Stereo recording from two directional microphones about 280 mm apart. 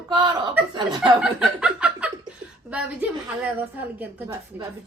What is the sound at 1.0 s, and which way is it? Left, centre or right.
A woman's voice, centre.